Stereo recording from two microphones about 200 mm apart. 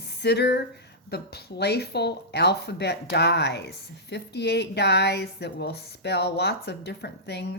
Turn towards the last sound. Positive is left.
turn(degrees=55)  # may be behind; listen again after turning